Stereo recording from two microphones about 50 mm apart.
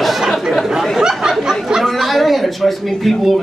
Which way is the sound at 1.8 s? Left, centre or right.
Centre.